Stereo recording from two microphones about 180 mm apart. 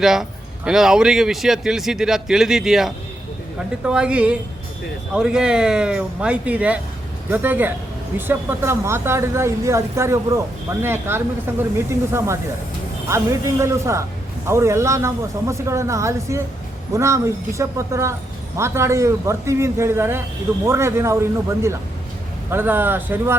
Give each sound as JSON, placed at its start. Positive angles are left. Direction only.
{"t": 0.0, "sound": "speech", "side_deg": 0}